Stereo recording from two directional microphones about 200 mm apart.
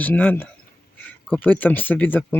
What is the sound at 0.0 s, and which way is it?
Speech, 10° left (ahead or behind).